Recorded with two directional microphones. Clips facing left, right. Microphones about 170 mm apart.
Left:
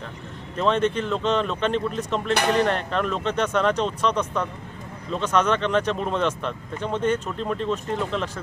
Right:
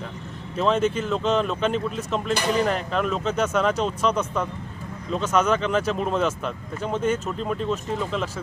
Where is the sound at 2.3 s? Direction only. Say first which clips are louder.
Left 2 dB; 60° left (ahead or behind).